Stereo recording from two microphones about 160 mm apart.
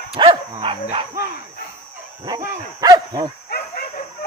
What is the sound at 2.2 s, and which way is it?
Speech, 25° right (ahead or behind).